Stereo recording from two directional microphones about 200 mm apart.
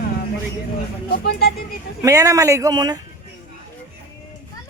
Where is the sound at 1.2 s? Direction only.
50° left (ahead or behind).